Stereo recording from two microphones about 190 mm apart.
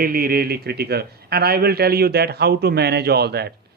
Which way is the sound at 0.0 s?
50° right (ahead or behind).